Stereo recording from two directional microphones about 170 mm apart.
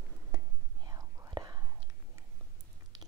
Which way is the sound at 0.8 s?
20° right (ahead or behind).